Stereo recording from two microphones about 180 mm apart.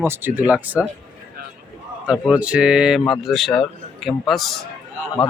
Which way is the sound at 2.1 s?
5° right (ahead or behind).